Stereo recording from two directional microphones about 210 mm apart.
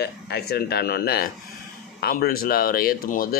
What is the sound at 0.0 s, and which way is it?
Speech, 50° left (ahead or behind).